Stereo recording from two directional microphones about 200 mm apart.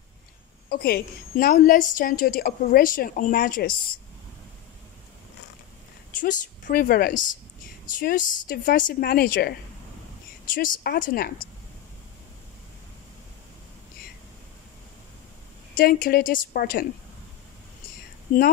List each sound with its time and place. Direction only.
0.7 s a woman's voice: 50° left (ahead or behind)
6.1 s a woman's voice: 40° left (ahead or behind)
15.7 s a woman's voice: 45° left (ahead or behind)
18.3 s a woman's voice: 40° left (ahead or behind)